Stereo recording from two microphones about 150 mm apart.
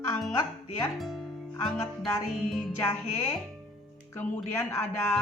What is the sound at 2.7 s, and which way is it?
Speech, 15° left (ahead or behind).